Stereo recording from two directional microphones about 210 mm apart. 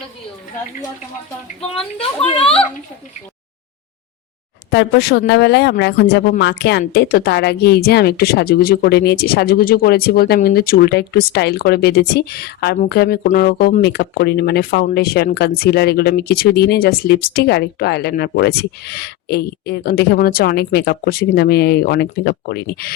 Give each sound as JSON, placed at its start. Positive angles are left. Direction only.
{"t": 2.2, "sound": "a child's voice", "side_deg": 25}
{"t": 4.7, "sound": "speech", "side_deg": 60}